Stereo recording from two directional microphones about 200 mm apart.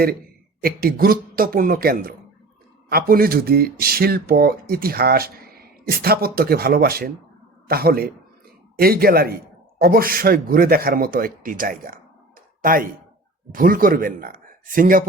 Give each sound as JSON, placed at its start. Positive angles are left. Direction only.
{"t": 0.6, "sound": "speech", "side_deg": -50}